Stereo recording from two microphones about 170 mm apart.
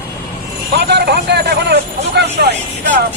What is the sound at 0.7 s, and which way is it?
Speech, 75° right (ahead or behind).